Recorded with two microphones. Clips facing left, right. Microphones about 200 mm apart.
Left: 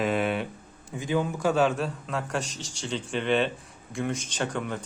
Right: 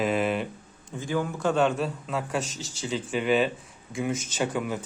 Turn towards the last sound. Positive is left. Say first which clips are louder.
# right 2 dB
turn(degrees=-5)  # may be behind; listen again after turning